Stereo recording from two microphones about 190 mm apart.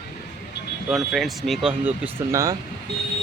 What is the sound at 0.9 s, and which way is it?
Speech, centre (ahead or behind).